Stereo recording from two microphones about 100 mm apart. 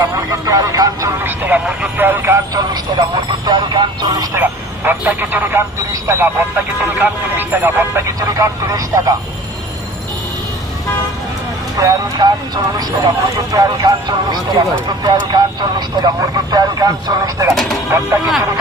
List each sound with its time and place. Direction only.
0.0 s speech: 35° right (ahead or behind)
1.2 s speech: 15° right (ahead or behind)
2.3 s speech: 40° right (ahead or behind)
4.4 s speech: 20° right (ahead or behind)
8.2 s speech: 35° right (ahead or behind)
11.7 s speech: 40° right (ahead or behind)